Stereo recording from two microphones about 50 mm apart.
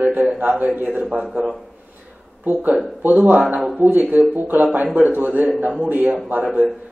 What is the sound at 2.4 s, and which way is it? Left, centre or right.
Speech, right.